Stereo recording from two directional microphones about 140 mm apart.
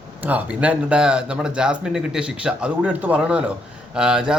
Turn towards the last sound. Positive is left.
turn(degrees=-5)  # may be behind; listen again after turning